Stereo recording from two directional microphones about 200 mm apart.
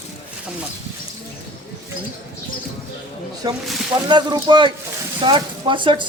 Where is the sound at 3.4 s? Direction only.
20° right (ahead or behind).